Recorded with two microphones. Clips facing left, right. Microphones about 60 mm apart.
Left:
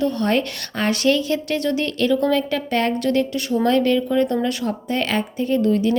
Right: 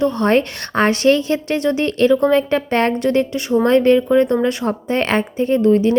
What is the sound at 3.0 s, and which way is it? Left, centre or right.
Speech, right.